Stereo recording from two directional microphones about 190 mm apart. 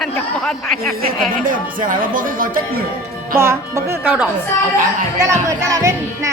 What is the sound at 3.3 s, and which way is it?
A woman's voice, 15° right (ahead or behind).